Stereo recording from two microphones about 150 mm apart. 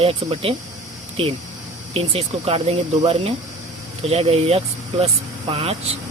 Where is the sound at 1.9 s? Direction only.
40° right (ahead or behind).